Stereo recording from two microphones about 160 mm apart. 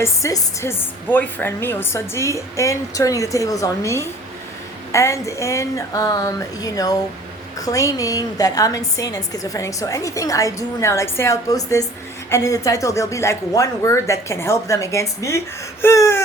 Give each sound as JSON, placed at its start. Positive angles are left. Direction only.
{"t": 0.0, "sound": "a woman's voice", "side_deg": 20}